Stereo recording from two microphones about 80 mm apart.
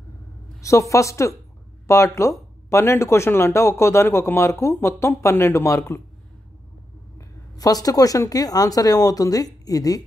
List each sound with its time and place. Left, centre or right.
0.6 s speech: left
7.2 s speech: left